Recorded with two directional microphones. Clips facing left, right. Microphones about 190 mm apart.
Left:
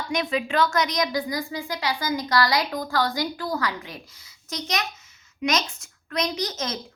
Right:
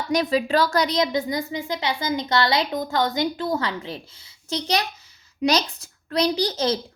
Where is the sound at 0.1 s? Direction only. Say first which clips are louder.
Right 5 dB; 35° right (ahead or behind).